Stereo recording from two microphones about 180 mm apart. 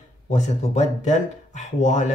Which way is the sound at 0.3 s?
40° left (ahead or behind).